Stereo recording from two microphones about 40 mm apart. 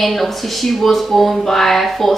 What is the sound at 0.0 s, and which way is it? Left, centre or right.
Speech, centre.